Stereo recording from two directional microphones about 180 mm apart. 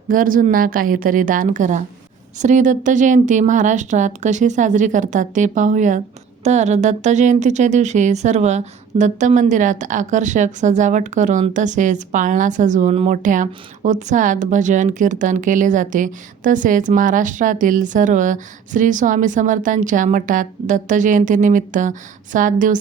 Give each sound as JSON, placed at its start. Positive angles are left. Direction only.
{"t": 0.1, "sound": "speech", "side_deg": -50}